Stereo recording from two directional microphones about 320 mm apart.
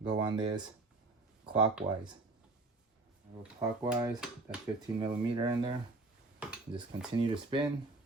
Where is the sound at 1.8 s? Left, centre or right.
Right.